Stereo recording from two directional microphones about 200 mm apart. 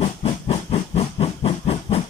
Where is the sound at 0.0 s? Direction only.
30° left (ahead or behind).